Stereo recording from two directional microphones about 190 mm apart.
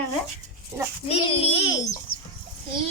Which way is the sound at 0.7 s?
15° right (ahead or behind).